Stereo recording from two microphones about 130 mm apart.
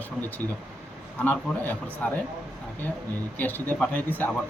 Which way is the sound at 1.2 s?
15° left (ahead or behind).